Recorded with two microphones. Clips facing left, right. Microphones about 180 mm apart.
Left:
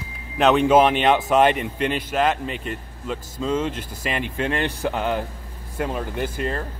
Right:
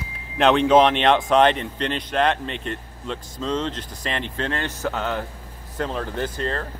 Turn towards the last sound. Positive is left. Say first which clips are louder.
# even
turn(degrees=10)  # may be behind; listen again after turning